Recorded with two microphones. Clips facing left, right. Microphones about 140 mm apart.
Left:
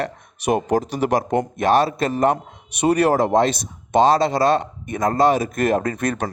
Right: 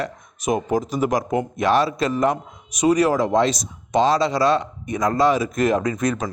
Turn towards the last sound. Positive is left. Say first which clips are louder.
# even
turn(degrees=60)  # may be behind; listen again after turning